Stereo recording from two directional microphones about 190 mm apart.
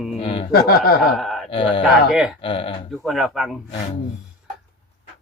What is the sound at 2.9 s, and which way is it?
Speech, centre (ahead or behind).